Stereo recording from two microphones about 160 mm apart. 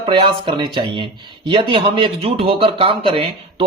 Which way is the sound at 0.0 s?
30° right (ahead or behind).